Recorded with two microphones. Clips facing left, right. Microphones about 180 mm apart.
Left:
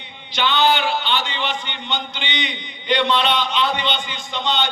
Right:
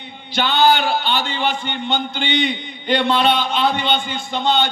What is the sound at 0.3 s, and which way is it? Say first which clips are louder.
A man's voice: right 3 dB; 45° right (ahead or behind).